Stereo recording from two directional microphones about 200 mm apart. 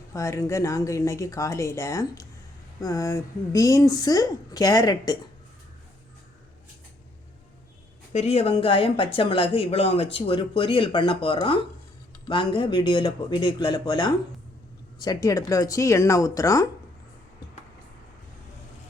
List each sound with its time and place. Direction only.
0.1 s a woman's voice: 15° left (ahead or behind)
8.1 s a woman's voice: 30° left (ahead or behind); by 16.6 s 15° left (ahead or behind)